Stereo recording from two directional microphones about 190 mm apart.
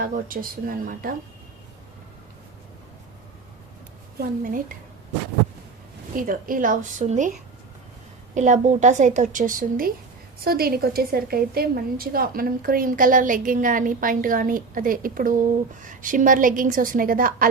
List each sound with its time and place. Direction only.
0.0 s a woman's voice: 45° right (ahead or behind)
4.2 s a woman's voice: 45° right (ahead or behind)
6.1 s a woman's voice: 45° right (ahead or behind)
8.4 s a woman's voice: 40° right (ahead or behind)